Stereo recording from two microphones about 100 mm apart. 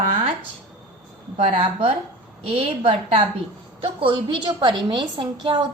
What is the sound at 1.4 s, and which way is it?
Speech, 90° right.